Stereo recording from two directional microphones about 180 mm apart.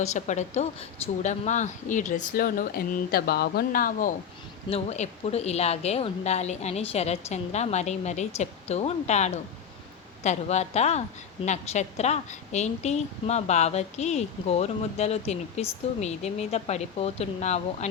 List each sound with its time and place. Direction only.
0.0 s speech: 40° left (ahead or behind)
4.7 s speech: 35° left (ahead or behind)